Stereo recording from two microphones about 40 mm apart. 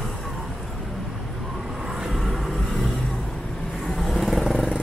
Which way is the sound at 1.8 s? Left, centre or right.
Centre.